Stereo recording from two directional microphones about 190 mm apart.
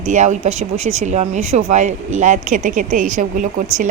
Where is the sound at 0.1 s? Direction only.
40° right (ahead or behind).